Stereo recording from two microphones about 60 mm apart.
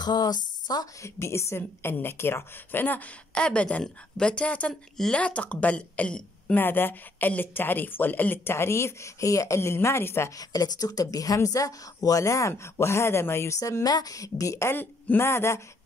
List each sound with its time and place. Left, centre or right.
1.0 s a woman's voice: left
1.6 s a woman's voice: left; by 6.5 s centre
6.5 s a woman's voice: left
8.5 s a woman's voice: left
10.3 s speech: left
13.6 s speech: left
14.7 s a woman's voice: left
15.2 s a woman's voice: left